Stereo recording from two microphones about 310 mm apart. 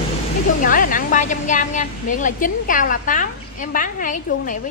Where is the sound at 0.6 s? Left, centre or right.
Left.